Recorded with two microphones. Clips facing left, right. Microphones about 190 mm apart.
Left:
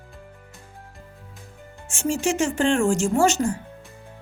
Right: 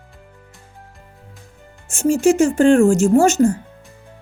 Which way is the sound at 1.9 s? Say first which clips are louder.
Right 9 dB; 40° right (ahead or behind).